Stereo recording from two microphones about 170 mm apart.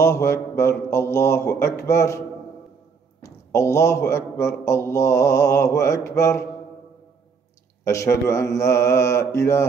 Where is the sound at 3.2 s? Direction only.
15° left (ahead or behind).